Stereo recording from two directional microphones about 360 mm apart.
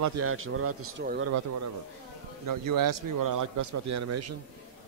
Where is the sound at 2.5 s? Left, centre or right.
Right.